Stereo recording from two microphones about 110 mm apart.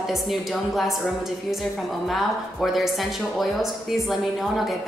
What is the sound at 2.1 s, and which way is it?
A woman's voice, centre (ahead or behind).